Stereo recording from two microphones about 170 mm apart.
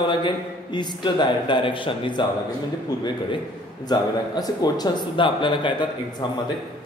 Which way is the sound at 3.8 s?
25° left (ahead or behind).